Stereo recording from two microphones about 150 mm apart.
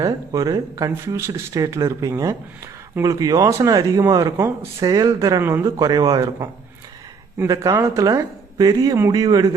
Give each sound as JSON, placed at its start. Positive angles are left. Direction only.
{"t": 0.0, "sound": "speech", "side_deg": -25}